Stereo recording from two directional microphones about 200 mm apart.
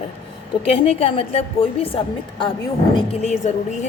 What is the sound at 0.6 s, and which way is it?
A woman's voice, 30° left (ahead or behind).